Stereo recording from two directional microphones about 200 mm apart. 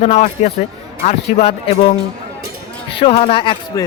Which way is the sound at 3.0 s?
30° left (ahead or behind).